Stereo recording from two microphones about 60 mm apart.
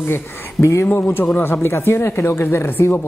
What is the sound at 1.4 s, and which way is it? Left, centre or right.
Speech, left.